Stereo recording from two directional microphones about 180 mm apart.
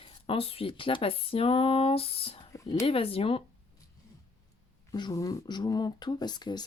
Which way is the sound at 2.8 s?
30° left (ahead or behind).